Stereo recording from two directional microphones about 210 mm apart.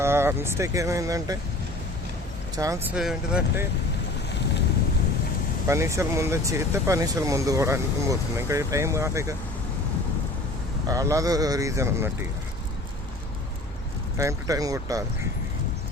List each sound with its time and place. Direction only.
0.0 s speech: 10° right (ahead or behind)
2.6 s speech: 15° right (ahead or behind)
2.9 s speech: 5° right (ahead or behind)
5.6 s speech: 15° right (ahead or behind)
10.8 s speech: 15° right (ahead or behind)
14.2 s speech: 15° right (ahead or behind)